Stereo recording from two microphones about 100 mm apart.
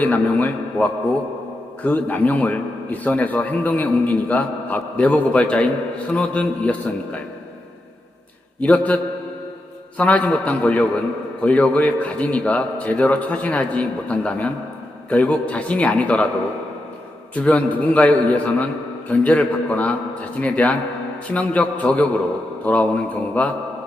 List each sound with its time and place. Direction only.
0.0 s a man's voice: 15° left (ahead or behind)
8.6 s a man's voice: 15° left (ahead or behind)
10.0 s a man's voice: 15° left (ahead or behind)
17.3 s a man's voice: 15° left (ahead or behind)